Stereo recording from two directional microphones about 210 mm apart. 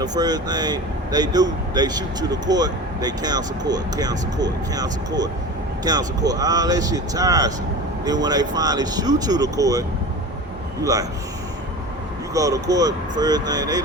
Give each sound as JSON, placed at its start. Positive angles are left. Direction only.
{"t": 0.0, "sound": "speech", "side_deg": -20}
{"t": 12.3, "sound": "speech", "side_deg": -15}